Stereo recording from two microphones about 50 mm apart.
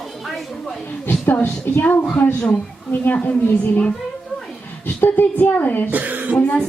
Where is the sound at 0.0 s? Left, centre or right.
Centre.